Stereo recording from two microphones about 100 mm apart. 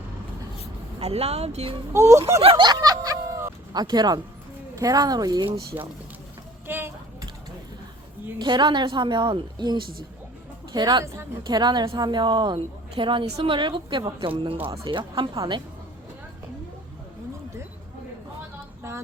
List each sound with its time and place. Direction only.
0.9 s speech: 90° right
1.9 s speech: 30° right (ahead or behind)
2.6 s music: 45° right (ahead or behind)
3.7 s a woman's voice: 45° right (ahead or behind)
5.7 s speech: 20° right (ahead or behind)
6.7 s a sound: 20° right (ahead or behind)
8.4 s a woman's voice: 50° right (ahead or behind); by 14.7 s 65° right (ahead or behind)
14.8 s a woman's voice: 55° right (ahead or behind)
18.8 s a sound: 25° right (ahead or behind)